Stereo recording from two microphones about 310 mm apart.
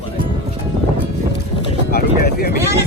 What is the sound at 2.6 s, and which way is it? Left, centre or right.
Vehicle, centre.